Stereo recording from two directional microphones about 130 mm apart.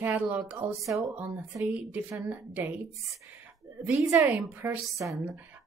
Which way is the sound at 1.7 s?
10° right (ahead or behind).